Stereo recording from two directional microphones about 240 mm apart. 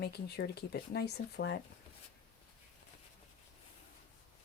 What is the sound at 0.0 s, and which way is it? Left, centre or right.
Speech, left.